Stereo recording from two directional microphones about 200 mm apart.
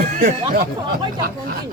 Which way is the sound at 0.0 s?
40° right (ahead or behind).